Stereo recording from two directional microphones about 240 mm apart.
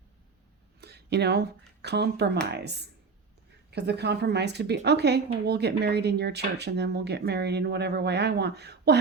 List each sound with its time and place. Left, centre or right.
0.8 s speech: right